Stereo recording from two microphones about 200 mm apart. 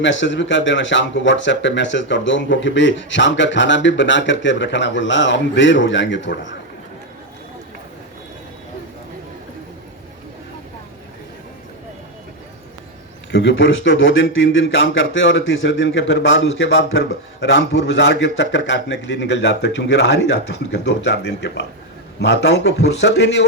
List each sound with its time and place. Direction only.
0.0 s speech: 65° left (ahead or behind)
13.3 s speech: 65° left (ahead or behind)